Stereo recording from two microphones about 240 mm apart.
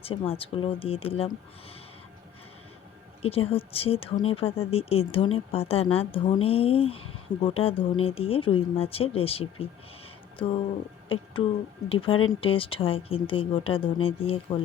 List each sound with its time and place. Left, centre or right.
0.0 s speech: left
3.2 s speech: left
11.1 s speech: left